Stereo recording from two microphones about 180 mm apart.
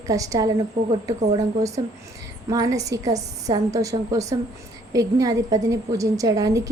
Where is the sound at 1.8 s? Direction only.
20° right (ahead or behind).